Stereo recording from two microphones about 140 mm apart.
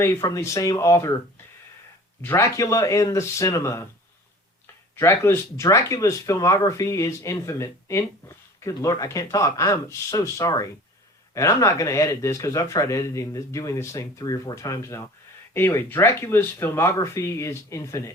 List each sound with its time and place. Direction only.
0.0 s speech: 20° left (ahead or behind)
2.2 s speech: 20° left (ahead or behind)